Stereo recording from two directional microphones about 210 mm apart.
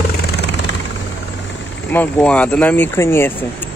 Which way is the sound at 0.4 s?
55° left (ahead or behind).